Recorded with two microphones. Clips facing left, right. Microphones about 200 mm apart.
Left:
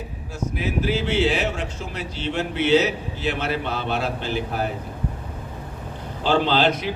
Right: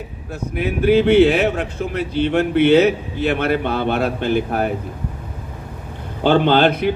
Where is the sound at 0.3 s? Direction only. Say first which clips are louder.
Right 3 dB; 60° right (ahead or behind).